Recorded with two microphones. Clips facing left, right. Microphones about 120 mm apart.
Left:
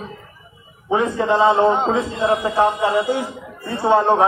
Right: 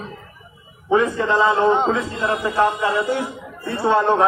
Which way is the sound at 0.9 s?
20° left (ahead or behind).